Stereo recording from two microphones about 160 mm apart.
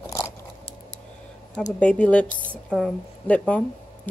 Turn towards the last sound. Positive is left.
turn(degrees=10)  # may be behind; listen again after turning